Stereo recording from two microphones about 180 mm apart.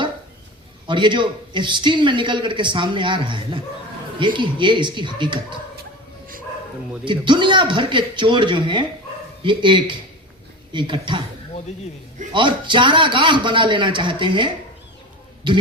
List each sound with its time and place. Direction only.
0.9 s a man's voice: 25° right (ahead or behind)
7.0 s a man's voice: 25° right (ahead or behind)
12.3 s a man's voice: 25° right (ahead or behind)